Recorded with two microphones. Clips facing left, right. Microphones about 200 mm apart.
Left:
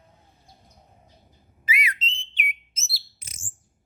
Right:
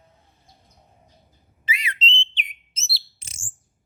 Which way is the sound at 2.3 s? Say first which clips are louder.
Left 4 dB; 30° right (ahead or behind).